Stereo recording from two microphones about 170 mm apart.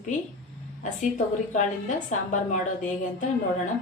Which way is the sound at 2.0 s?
45° left (ahead or behind).